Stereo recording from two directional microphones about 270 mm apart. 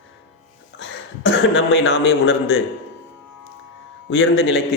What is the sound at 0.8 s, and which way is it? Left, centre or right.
A man's voice, left.